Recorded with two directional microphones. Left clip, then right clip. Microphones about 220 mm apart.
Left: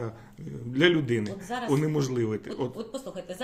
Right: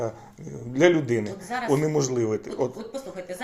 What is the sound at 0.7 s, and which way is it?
Speech, 45° left (ahead or behind).